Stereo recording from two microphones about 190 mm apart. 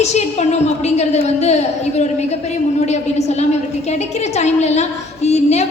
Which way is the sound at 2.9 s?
35° left (ahead or behind).